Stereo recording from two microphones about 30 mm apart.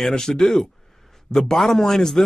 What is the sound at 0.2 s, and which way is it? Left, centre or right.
Speech, centre.